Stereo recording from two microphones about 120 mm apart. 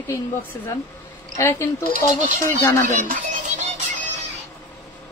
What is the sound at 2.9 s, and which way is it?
Music, 90° right.